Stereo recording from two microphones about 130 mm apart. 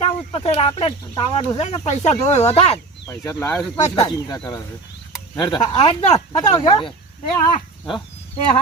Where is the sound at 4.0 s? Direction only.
30° left (ahead or behind).